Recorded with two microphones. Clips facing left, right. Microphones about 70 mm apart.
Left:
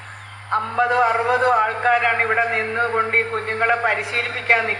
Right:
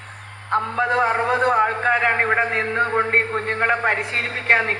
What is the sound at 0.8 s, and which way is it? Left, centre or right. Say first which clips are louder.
A man's voice: left 3 dB; right.